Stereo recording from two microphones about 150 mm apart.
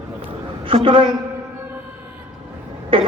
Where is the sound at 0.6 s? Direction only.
35° right (ahead or behind).